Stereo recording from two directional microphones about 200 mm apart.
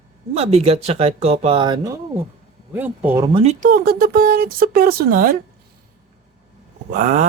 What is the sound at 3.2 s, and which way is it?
Speech, 30° right (ahead or behind).